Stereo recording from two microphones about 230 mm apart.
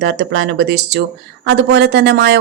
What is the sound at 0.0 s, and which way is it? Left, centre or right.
A woman's voice, right.